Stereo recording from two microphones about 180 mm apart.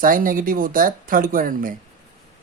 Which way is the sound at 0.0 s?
50° right (ahead or behind).